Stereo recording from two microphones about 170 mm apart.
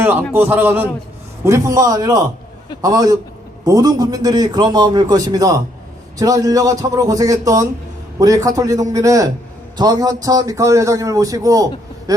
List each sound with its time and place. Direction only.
0.3 s a man's voice: 10° right (ahead or behind)